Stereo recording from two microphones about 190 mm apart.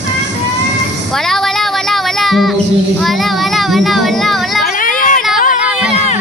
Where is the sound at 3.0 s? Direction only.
Centre (ahead or behind).